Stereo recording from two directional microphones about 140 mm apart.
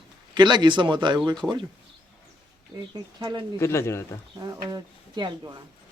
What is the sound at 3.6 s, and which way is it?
Speech, 20° left (ahead or behind).